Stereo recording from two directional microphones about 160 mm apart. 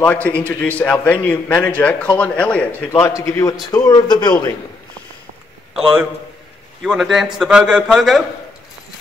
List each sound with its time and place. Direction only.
0.0 s a man's voice: 10° left (ahead or behind)
2.9 s speech: 20° left (ahead or behind)
6.8 s speech: centre (ahead or behind)